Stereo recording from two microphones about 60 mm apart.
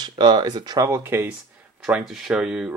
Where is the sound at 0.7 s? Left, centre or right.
Right.